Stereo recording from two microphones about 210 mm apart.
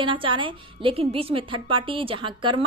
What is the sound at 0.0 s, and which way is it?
A woman's voice, 25° right (ahead or behind).